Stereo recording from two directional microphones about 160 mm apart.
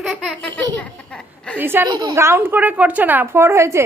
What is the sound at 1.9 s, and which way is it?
A woman's voice, 25° right (ahead or behind).